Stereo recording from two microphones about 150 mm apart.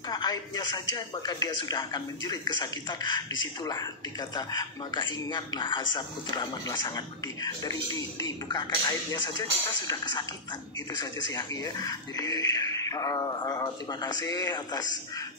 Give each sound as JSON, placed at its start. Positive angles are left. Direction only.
{"t": 0.1, "sound": "speech", "side_deg": 25}
{"t": 4.4, "sound": "speech", "side_deg": 25}